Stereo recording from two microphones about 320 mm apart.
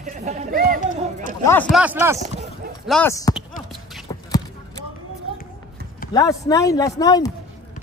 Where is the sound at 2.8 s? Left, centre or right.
Centre.